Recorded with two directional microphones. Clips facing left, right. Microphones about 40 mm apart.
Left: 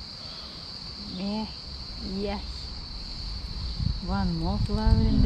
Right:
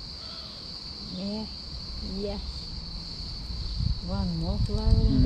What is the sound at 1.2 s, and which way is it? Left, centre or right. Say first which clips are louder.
Speech: left 3 dB; left.